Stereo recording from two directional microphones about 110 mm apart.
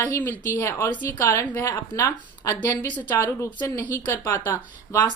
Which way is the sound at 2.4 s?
30° left (ahead or behind).